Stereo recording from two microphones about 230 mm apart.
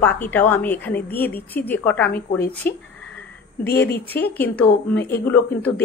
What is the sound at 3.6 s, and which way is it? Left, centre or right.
Speech, left.